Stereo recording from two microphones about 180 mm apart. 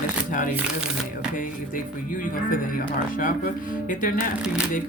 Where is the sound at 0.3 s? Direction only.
45° left (ahead or behind).